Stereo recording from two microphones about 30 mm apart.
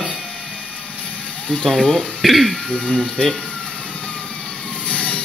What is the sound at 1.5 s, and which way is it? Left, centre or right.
Speech, left.